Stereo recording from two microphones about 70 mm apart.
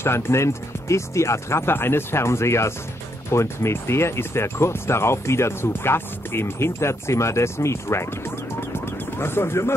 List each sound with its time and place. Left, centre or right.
0.0 s speech: left
9.2 s speech: left